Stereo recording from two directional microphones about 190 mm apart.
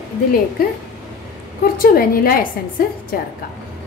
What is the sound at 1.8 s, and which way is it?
A woman's voice, 50° left (ahead or behind).